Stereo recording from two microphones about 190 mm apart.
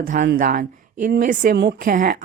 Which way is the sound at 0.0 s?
45° right (ahead or behind).